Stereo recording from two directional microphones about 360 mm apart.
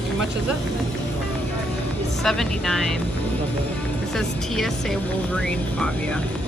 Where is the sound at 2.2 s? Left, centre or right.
Centre.